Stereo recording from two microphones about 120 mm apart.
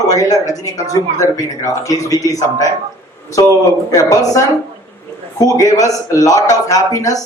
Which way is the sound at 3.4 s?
35° left (ahead or behind).